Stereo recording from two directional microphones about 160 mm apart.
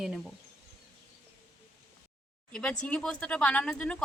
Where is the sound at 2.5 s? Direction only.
5° left (ahead or behind).